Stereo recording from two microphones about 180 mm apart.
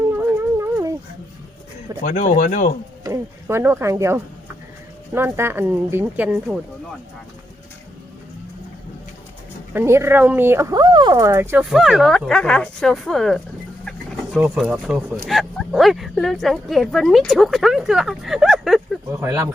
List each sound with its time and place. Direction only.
0.1 s music: 15° right (ahead or behind)
2.0 s speech: 45° left (ahead or behind)
3.0 s speech: 15° right (ahead or behind)
9.7 s speech: 15° right (ahead or behind)
11.6 s speech: centre (ahead or behind)
19.1 s speech: 15° right (ahead or behind)